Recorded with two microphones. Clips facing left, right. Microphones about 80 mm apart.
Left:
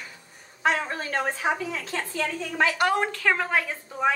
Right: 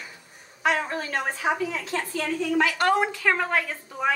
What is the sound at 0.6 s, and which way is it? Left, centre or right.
A woman's voice, left.